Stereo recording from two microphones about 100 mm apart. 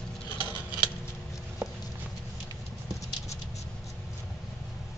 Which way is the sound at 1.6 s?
15° right (ahead or behind).